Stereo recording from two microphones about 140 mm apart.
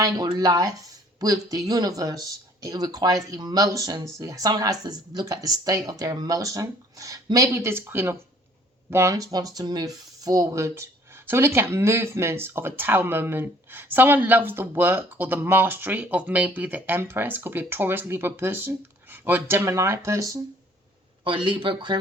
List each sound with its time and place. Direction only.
0.3 s speech: 25° right (ahead or behind)
21.2 s speech: 35° right (ahead or behind)